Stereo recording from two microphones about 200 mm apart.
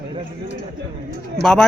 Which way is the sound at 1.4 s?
5° left (ahead or behind).